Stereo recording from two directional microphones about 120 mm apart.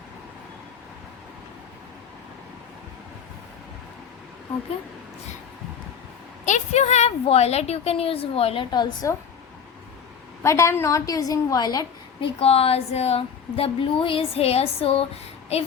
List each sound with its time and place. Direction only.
6.4 s speech: 80° left; by 8.6 s 55° left (ahead or behind)
8.7 s a woman's voice: 35° left (ahead or behind)
10.4 s a woman's voice: 25° left (ahead or behind)
12.4 s speech: 55° left (ahead or behind)